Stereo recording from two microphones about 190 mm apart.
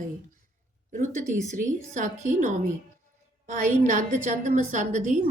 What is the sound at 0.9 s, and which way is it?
A woman's voice, 40° right (ahead or behind).